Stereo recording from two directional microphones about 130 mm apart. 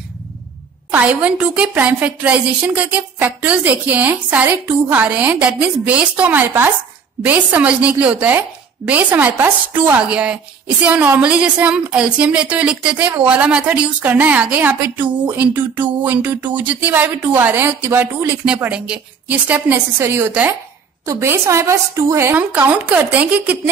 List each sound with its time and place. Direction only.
0.9 s speech: 10° right (ahead or behind)